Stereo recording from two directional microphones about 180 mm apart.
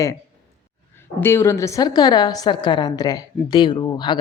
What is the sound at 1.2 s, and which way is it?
Speech, 15° left (ahead or behind).